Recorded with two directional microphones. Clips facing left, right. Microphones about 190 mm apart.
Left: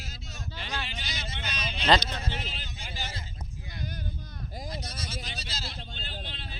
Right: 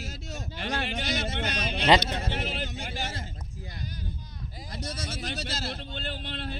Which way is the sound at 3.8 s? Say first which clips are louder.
Left 2 dB; 55° left (ahead or behind).